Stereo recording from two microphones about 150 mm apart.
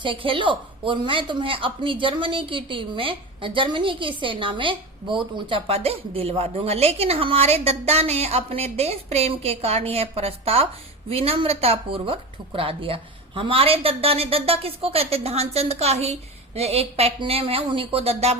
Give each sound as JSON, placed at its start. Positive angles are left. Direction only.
{"t": 0.0, "sound": "a woman's voice", "side_deg": -35}